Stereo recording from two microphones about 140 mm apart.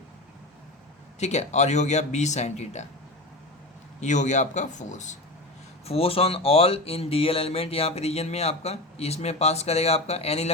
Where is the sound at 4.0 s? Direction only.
60° left (ahead or behind).